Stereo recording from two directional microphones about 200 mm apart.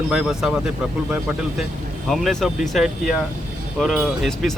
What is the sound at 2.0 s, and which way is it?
Speech, centre (ahead or behind).